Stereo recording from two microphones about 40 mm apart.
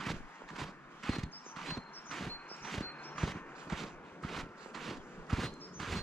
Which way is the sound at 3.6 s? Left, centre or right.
Centre.